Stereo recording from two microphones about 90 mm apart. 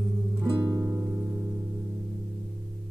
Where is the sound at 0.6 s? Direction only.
45° right (ahead or behind).